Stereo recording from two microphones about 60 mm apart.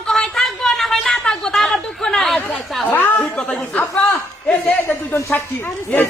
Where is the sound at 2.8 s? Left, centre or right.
Left.